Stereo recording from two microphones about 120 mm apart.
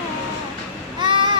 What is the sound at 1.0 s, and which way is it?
Honk, 40° right (ahead or behind).